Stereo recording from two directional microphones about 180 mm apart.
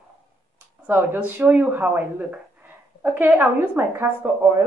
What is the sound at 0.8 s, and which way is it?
A woman's voice, 10° right (ahead or behind).